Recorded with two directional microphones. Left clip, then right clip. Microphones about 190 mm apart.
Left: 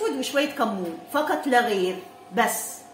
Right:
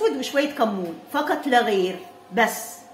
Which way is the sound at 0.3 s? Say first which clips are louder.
Right 2 dB; 25° right (ahead or behind).